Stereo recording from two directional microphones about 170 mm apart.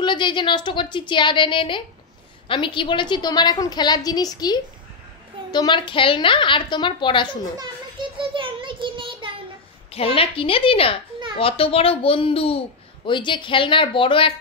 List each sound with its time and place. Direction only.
0.0 s a woman's voice: 30° left (ahead or behind)
7.5 s a sound: 25° right (ahead or behind)
9.9 s a child's voice: 30° left (ahead or behind)